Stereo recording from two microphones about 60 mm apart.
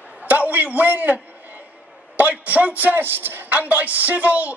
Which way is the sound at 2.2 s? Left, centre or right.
Right.